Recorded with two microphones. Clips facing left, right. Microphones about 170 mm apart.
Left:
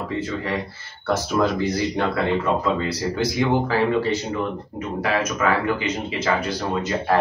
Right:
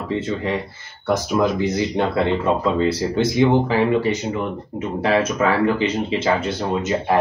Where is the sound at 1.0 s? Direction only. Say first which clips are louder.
Right 2 dB; 15° right (ahead or behind).